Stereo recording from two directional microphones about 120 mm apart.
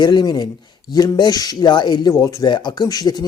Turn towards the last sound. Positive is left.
turn(degrees=30)  # may be behind; listen again after turning